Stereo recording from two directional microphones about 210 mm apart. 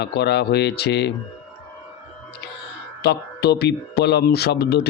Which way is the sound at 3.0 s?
50° left (ahead or behind).